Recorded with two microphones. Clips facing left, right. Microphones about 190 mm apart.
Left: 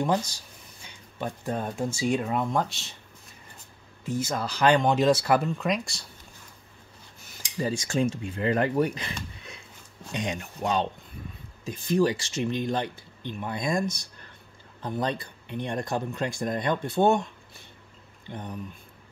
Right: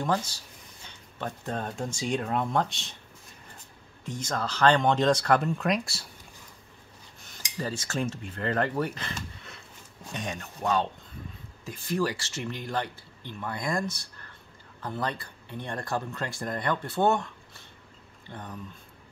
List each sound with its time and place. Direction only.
0.8 s speech: 10° left (ahead or behind)
4.0 s speech: 5° left (ahead or behind)
7.5 s speech: 15° left (ahead or behind)
18.3 s speech: 20° left (ahead or behind)